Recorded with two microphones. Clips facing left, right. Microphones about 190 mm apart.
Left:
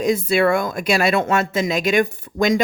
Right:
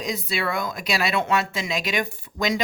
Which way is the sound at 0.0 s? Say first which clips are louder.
Left 10 dB; 50° left (ahead or behind).